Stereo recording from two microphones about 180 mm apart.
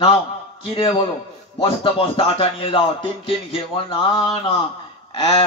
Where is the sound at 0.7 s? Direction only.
30° left (ahead or behind).